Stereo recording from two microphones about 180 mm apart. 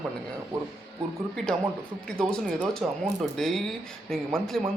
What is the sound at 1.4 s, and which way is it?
A man's voice, centre (ahead or behind).